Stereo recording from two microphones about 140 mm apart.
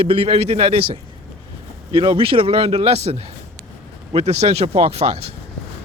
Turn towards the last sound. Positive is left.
turn(degrees=-45)  # may be behind; listen again after turning